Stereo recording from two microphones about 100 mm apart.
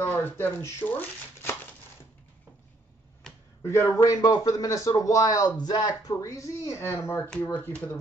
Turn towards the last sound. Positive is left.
turn(degrees=20)  # may be behind; listen again after turning